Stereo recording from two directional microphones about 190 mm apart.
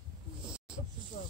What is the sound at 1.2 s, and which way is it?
Snake, 40° left (ahead or behind).